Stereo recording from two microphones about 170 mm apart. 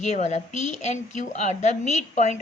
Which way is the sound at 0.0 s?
40° left (ahead or behind).